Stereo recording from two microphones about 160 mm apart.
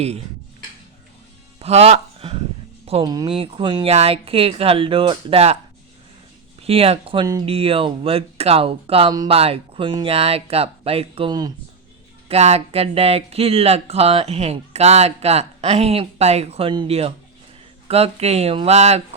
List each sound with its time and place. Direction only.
1.6 s speech: 40° right (ahead or behind)
3.0 s speech: 25° right (ahead or behind)
6.6 s speech: 40° right (ahead or behind)
12.3 s speech: 40° right (ahead or behind)